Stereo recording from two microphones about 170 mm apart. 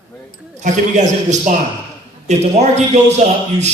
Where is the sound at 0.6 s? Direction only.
45° right (ahead or behind).